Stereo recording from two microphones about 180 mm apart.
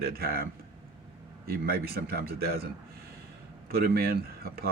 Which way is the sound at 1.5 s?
55° right (ahead or behind).